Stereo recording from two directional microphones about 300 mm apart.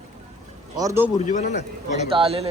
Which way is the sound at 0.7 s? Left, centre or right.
Centre.